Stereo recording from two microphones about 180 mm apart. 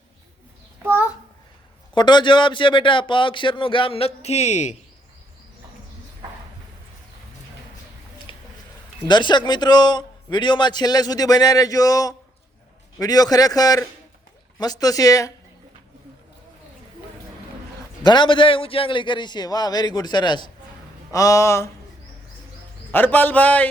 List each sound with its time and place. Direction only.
0.8 s a sound: 10° right (ahead or behind)
2.0 s a man's voice: 25° left (ahead or behind); by 4.8 s 40° left (ahead or behind)
9.0 s a man's voice: 25° left (ahead or behind)
18.0 s a man's voice: 25° left (ahead or behind)
22.9 s a man's voice: 10° left (ahead or behind)